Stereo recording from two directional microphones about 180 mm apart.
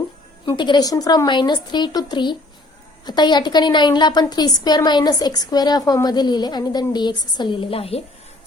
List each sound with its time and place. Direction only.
0.4 s a woman's voice: 25° left (ahead or behind)